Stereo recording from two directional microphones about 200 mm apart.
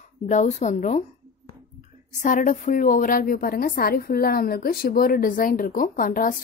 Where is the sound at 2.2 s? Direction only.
40° left (ahead or behind).